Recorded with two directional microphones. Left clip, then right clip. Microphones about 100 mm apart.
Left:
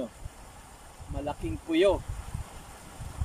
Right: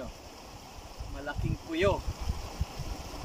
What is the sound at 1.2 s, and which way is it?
Speech, 55° left (ahead or behind).